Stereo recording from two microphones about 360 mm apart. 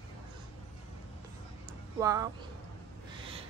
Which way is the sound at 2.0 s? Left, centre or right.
Centre.